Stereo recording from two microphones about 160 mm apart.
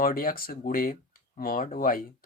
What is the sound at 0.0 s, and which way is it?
Speech, 65° left (ahead or behind).